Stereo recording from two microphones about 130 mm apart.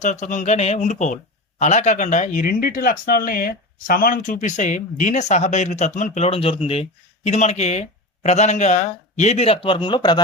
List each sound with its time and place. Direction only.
0.0 s speech: 70° left (ahead or behind); by 6.8 s 50° left (ahead or behind)
7.3 s speech: 60° left (ahead or behind); by 10.2 s 35° left (ahead or behind)